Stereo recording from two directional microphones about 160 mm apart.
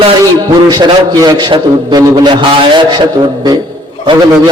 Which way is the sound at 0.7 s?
25° right (ahead or behind).